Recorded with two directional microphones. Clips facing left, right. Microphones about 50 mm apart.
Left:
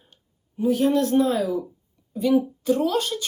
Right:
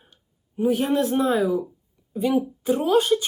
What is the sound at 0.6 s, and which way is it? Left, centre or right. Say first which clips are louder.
Speech: left 1 dB; right.